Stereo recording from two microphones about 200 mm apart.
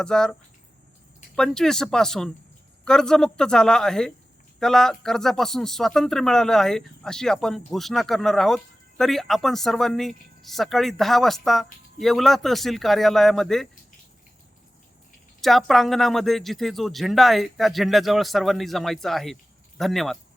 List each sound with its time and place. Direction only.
0.0 s speech: 5° left (ahead or behind)
1.4 s speech: 5° left (ahead or behind)
15.4 s speech: centre (ahead or behind)